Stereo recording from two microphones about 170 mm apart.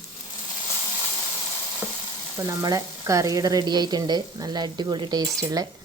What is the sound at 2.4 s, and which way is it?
Frying, 20° right (ahead or behind).